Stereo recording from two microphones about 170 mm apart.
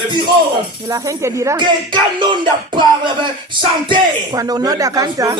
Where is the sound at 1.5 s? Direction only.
25° right (ahead or behind).